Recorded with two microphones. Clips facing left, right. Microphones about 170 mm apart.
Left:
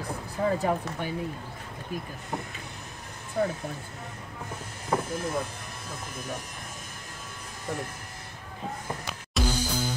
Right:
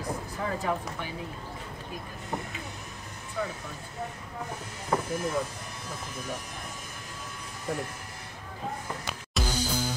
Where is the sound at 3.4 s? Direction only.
45° left (ahead or behind).